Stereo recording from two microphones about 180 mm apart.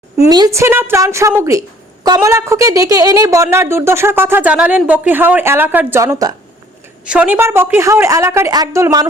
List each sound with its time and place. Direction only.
0.2 s speech: 20° right (ahead or behind)
7.0 s speech: 5° right (ahead or behind)